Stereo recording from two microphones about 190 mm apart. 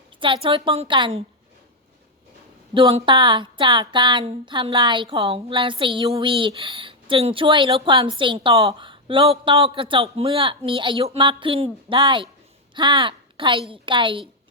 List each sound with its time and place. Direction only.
0.2 s speech: 25° right (ahead or behind)
2.7 s a woman's voice: 25° right (ahead or behind)